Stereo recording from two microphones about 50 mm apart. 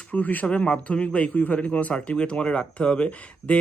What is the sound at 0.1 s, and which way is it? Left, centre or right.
A man's voice, left.